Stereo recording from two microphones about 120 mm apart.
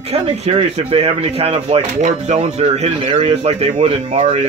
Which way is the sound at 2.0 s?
75° right (ahead or behind).